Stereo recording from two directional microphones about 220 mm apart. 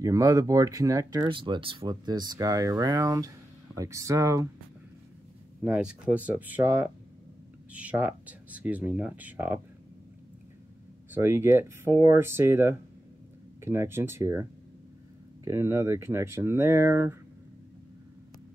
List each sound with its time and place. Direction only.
0.0 s speech: 15° right (ahead or behind)
5.6 s speech: 5° right (ahead or behind)
11.1 s speech: 10° right (ahead or behind)